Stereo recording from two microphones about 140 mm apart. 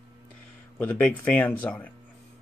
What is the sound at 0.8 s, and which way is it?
Speech, 10° left (ahead or behind).